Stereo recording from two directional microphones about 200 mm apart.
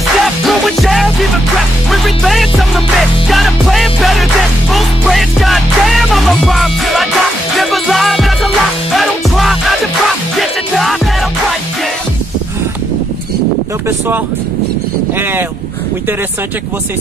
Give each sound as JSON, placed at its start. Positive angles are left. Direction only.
{"t": 0.2, "sound": "music", "side_deg": 0}
{"t": 13.8, "sound": "speech", "side_deg": -10}